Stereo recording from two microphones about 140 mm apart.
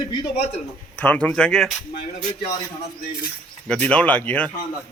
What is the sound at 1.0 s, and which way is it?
Speech, 10° left (ahead or behind).